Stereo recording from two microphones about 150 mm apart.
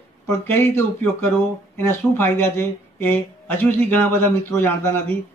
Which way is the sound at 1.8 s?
15° left (ahead or behind).